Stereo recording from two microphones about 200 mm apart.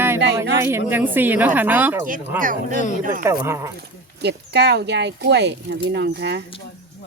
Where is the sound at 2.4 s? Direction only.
40° right (ahead or behind).